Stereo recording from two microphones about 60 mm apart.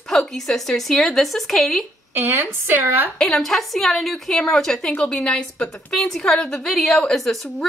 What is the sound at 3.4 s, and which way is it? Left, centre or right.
A woman's voice, centre.